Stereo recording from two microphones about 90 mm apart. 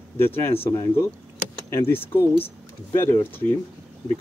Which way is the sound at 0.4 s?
30° left (ahead or behind).